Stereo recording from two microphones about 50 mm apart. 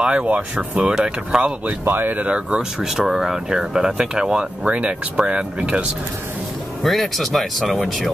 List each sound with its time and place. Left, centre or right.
0.0 s speech: right
1.9 s speech: right
2.1 s speech: right
2.8 s speech: centre
6.8 s speech: centre